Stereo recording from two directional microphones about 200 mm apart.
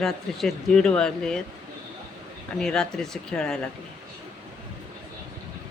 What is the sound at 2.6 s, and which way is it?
Speech, 5° left (ahead or behind).